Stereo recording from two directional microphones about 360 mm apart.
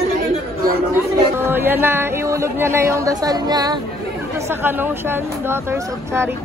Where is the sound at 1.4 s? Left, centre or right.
Centre.